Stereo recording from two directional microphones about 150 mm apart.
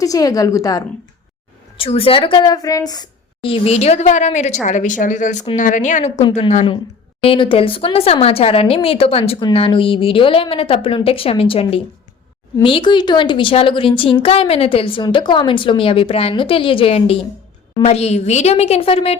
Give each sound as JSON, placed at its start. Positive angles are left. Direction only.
{"t": 0.0, "sound": "a woman's voice", "side_deg": 25}
{"t": 1.8, "sound": "a woman's voice", "side_deg": 40}
{"t": 7.2, "sound": "a woman's voice", "side_deg": 35}